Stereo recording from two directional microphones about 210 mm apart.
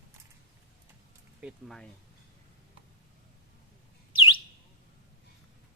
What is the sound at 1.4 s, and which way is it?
Speech, 5° right (ahead or behind).